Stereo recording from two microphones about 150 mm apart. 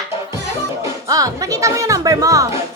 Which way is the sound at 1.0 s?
25° right (ahead or behind).